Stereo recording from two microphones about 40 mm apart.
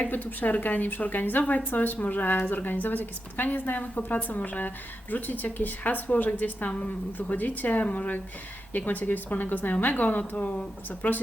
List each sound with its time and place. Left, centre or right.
0.0 s a woman's voice: left
8.7 s a woman's voice: left